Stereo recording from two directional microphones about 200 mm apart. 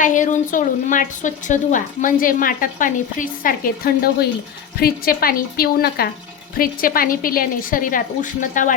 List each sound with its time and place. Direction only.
0.0 s a woman's voice: 40° left (ahead or behind)